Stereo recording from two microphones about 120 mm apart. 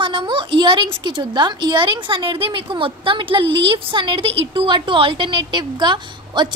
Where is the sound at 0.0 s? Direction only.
45° right (ahead or behind).